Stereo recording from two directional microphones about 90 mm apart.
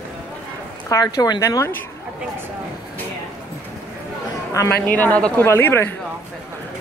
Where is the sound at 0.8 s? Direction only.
40° left (ahead or behind).